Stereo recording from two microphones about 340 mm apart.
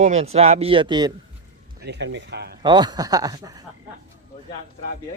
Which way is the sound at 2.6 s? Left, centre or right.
Centre.